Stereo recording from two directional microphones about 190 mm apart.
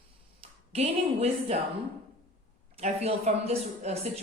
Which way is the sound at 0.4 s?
35° right (ahead or behind).